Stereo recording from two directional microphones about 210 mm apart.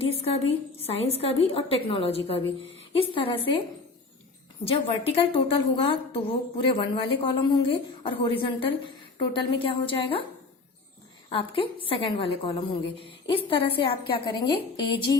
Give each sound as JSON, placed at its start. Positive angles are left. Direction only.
{"t": 0.0, "sound": "a woman's voice", "side_deg": 30}
{"t": 4.6, "sound": "a woman's voice", "side_deg": 25}
{"t": 11.3, "sound": "a woman's voice", "side_deg": 25}